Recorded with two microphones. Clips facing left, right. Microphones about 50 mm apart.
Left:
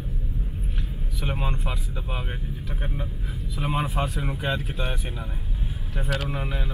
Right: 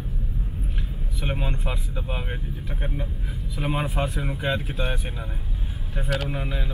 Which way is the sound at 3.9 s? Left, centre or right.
Right.